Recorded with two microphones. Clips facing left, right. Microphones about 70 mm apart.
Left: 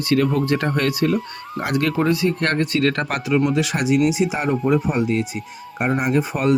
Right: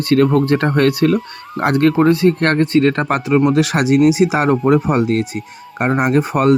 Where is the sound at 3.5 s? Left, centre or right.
Right.